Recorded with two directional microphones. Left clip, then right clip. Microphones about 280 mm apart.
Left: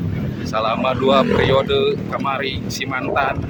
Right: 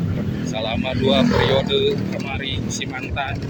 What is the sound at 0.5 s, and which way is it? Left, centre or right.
Speech, left.